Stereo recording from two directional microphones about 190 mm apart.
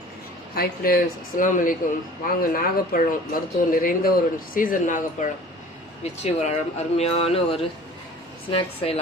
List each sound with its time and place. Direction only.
0.5 s speech: 50° left (ahead or behind); by 9.0 s 30° left (ahead or behind)